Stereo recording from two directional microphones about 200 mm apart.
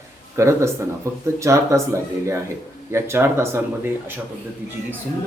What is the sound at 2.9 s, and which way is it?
Speech, 15° right (ahead or behind).